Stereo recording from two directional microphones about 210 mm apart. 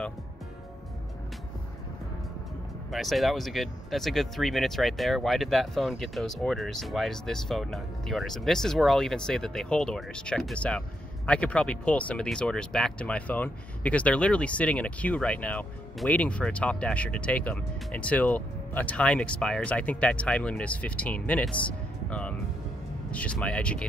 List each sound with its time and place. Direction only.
2.9 s speech: centre (ahead or behind)